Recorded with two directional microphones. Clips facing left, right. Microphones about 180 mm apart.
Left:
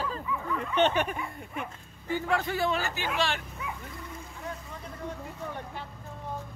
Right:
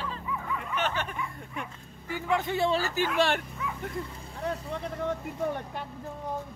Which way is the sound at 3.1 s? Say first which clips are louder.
Right 4 dB; 55° right (ahead or behind).